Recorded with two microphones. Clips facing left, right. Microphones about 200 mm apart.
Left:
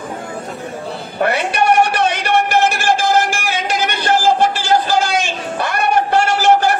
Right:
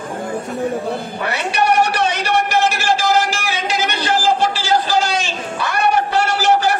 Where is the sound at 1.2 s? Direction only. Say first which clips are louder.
Left 5 dB; 55° left (ahead or behind).